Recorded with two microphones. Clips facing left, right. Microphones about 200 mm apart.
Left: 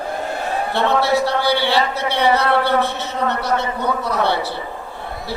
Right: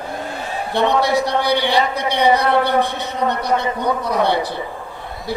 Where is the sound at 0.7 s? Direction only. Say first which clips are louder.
Right 2 dB; 15° right (ahead or behind).